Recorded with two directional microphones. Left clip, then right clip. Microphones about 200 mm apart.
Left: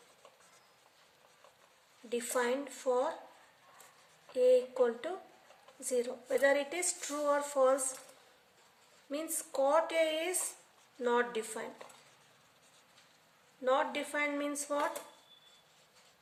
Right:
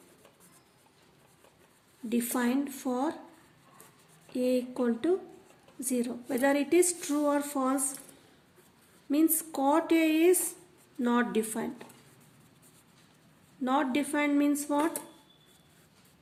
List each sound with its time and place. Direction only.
2.0 s a woman's voice: 35° right (ahead or behind)
4.4 s a woman's voice: 35° right (ahead or behind)
9.0 s a woman's voice: 35° right (ahead or behind)
13.7 s a woman's voice: 35° right (ahead or behind)